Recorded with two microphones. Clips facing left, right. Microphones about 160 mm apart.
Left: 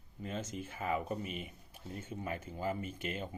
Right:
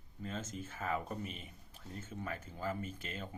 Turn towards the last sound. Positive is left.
turn(degrees=-40)  # may be behind; listen again after turning